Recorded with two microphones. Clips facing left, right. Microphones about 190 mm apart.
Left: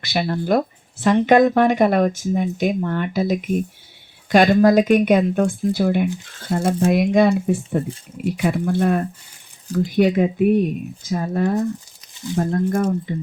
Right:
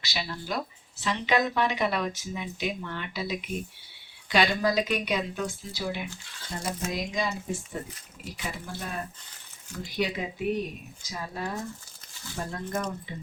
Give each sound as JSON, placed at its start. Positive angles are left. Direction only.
{"t": 0.0, "sound": "speech", "side_deg": 55}
{"t": 12.1, "sound": "a sound", "side_deg": 20}
{"t": 12.4, "sound": "speech", "side_deg": 50}